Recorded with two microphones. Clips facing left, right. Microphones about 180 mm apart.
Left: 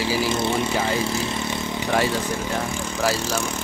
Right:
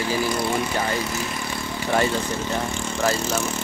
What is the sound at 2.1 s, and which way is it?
Speech, 10° left (ahead or behind).